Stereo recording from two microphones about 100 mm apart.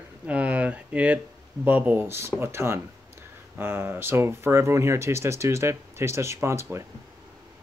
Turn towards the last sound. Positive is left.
turn(degrees=-30)  # may be behind; listen again after turning